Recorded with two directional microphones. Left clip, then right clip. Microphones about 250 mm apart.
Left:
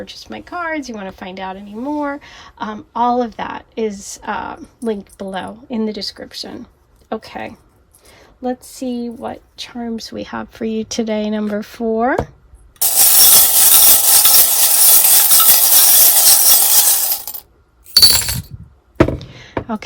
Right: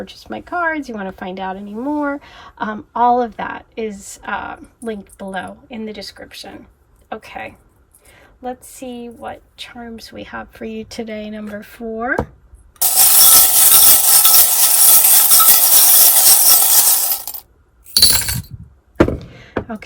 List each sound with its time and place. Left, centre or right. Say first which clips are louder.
0.0 s speech: right 1 dB; centre
12.8 s a sound: left 1 dB; centre
18.1 s glass: left 2 dB; centre
18.9 s door: even; centre